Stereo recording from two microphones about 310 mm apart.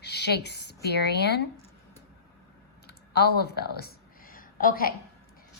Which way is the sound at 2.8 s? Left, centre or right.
Left.